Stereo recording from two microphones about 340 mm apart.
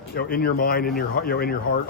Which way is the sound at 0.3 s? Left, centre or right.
Left.